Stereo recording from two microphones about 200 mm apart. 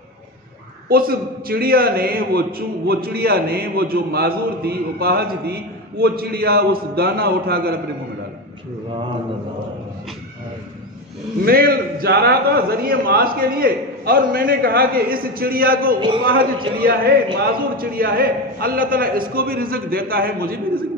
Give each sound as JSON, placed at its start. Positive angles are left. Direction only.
{"t": 0.8, "sound": "a man's voice", "side_deg": -50}
{"t": 11.4, "sound": "a man's voice", "side_deg": -50}